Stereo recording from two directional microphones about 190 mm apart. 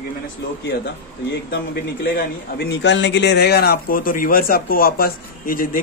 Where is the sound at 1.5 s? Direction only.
55° left (ahead or behind).